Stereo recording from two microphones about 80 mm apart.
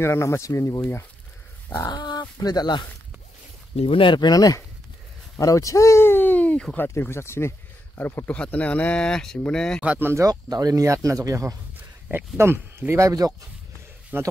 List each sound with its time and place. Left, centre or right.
0.0 s speech: left
1.9 s speech: left
4.0 s speech: left
4.3 s speech: left; by 6.9 s centre
6.9 s speech: left
8.3 s speech: centre
9.8 s speech: right
10.2 s speech: right
12.4 s speech: right
14.1 s speech: right